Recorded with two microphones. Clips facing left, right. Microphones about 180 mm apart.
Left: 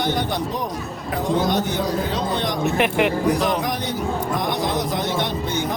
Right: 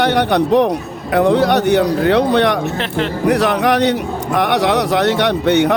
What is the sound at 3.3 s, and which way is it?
A man's voice, 70° right (ahead or behind).